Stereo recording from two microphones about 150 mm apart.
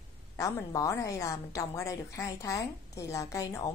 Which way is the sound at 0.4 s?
20° left (ahead or behind).